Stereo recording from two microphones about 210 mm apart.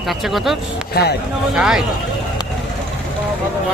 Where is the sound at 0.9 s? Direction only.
50° left (ahead or behind).